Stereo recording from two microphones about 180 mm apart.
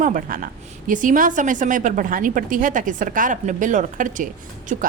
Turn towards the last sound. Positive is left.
turn(degrees=-45)  # may be behind; listen again after turning